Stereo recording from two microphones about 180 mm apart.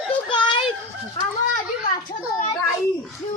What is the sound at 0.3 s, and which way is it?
Children playing, 25° left (ahead or behind).